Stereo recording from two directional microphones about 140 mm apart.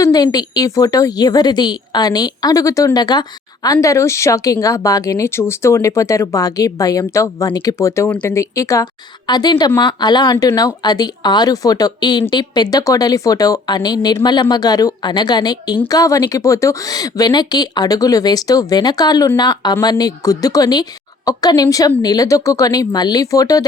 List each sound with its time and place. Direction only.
0.0 s a woman's voice: 30° left (ahead or behind); by 8.4 s 10° left (ahead or behind)
8.4 s a woman's voice: 20° left (ahead or behind)